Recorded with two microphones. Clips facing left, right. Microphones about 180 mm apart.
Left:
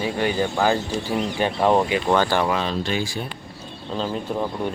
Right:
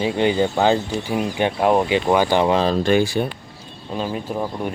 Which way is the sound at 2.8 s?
55° right (ahead or behind).